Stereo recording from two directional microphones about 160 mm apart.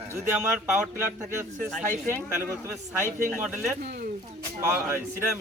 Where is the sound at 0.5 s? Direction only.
10° right (ahead or behind).